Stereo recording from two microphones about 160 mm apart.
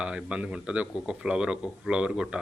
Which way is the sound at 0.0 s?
5° right (ahead or behind).